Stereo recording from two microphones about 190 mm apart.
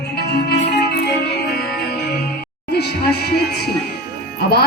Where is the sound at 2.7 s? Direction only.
55° left (ahead or behind).